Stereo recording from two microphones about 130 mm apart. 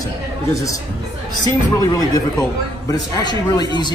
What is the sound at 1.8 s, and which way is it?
Speech, 30° left (ahead or behind).